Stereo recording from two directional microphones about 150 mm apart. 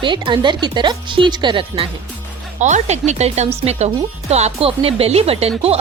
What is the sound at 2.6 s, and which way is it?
Speech, 50° right (ahead or behind).